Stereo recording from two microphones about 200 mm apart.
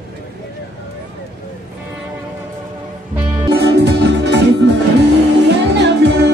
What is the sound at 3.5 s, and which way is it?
Music, 55° right (ahead or behind).